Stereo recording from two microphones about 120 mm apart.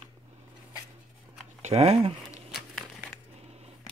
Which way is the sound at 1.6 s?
65° right (ahead or behind).